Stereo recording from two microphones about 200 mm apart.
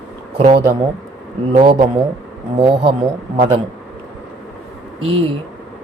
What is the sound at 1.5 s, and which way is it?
Speech, 30° right (ahead or behind).